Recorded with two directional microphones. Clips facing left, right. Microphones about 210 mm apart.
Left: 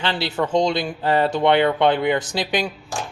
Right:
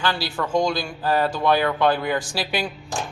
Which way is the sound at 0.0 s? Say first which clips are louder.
Left 2 dB; 25° left (ahead or behind).